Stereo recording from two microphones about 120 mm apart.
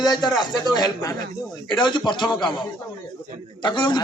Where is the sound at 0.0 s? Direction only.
35° left (ahead or behind).